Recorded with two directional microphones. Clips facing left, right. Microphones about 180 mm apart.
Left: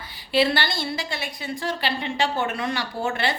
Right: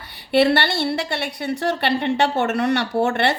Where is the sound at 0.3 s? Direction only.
65° right (ahead or behind).